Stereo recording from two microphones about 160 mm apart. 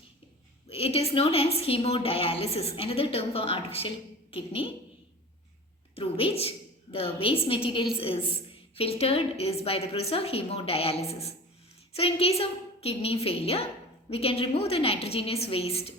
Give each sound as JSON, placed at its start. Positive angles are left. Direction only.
{"t": 0.7, "sound": "a woman's voice", "side_deg": 40}
{"t": 6.0, "sound": "a woman's voice", "side_deg": 35}